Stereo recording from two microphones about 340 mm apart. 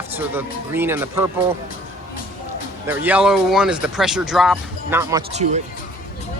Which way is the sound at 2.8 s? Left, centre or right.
Centre.